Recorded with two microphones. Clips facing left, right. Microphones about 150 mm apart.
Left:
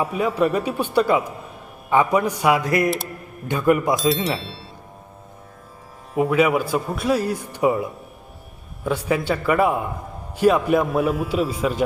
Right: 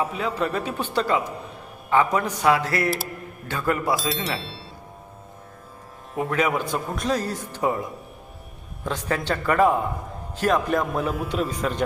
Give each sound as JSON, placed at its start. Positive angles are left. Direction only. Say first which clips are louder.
{"t": 0.2, "sound": "a man's voice", "louder": "left 5 dB", "side_deg": 10}
{"t": 4.1, "sound": "speech", "louder": "left 5 dB", "side_deg": 0}
{"t": 6.1, "sound": "a man's voice", "louder": "left 5 dB", "side_deg": 5}